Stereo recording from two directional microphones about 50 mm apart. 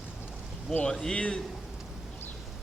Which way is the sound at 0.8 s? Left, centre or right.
Centre.